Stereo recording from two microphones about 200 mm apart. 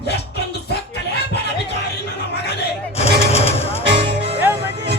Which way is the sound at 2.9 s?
30° left (ahead or behind).